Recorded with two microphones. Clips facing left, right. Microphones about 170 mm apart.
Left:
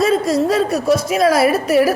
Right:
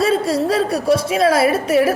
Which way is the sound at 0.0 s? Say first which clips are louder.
Left 2 dB; 30° right (ahead or behind).